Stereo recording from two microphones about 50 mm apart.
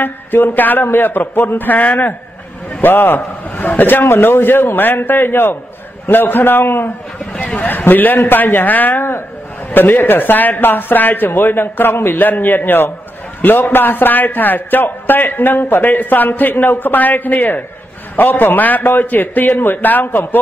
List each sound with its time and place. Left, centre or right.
0.0 s a man's voice: left
7.3 s a man's voice: left